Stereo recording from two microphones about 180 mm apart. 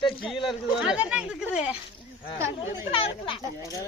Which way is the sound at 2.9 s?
30° left (ahead or behind).